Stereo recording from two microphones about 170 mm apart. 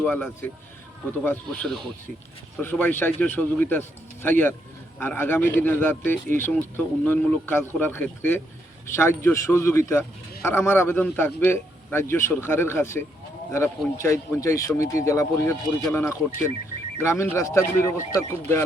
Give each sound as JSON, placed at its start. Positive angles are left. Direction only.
{"t": 0.0, "sound": "speech", "side_deg": 10}